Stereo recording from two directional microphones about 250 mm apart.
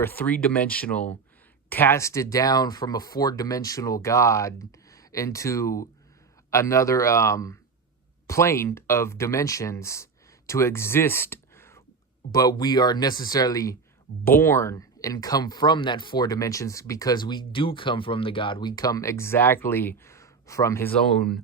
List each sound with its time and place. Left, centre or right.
0.0 s speech: centre